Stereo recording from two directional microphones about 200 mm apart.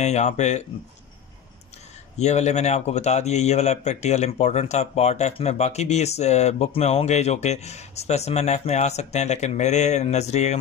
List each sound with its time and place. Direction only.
0.0 s speech: 35° left (ahead or behind)
2.1 s speech: 35° left (ahead or behind)